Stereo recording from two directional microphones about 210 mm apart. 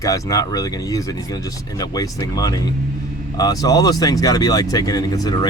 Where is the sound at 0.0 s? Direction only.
15° left (ahead or behind).